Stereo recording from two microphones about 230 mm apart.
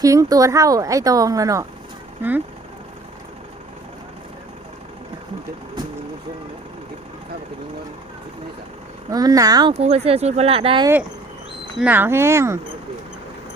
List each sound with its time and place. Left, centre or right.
0.0 s a woman's voice: centre
9.0 s speech: centre
11.8 s a woman's voice: centre